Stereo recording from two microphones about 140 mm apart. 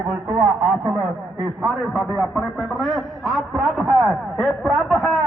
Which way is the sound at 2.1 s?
Centre (ahead or behind).